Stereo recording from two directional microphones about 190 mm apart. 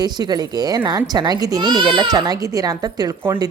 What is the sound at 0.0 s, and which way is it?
Speech, 20° right (ahead or behind).